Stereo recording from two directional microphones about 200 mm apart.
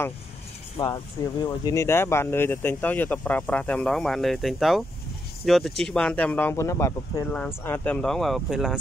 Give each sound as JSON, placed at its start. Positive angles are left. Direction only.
{"t": 0.7, "sound": "speech", "side_deg": 20}